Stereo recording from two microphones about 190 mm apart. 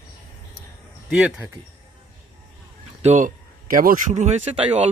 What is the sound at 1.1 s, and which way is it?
Speech, 5° right (ahead or behind).